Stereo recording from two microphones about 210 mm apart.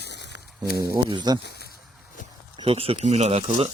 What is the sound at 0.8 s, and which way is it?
Speech, 20° right (ahead or behind).